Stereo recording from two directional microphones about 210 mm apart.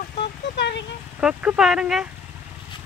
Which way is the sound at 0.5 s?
55° left (ahead or behind).